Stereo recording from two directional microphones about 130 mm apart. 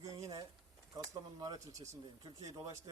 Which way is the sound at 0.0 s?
25° right (ahead or behind).